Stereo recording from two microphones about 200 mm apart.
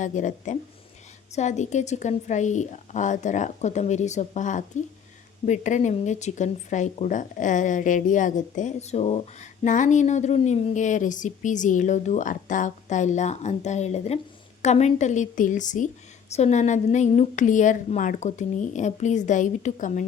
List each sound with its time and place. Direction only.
0.0 s speech: 40° left (ahead or behind)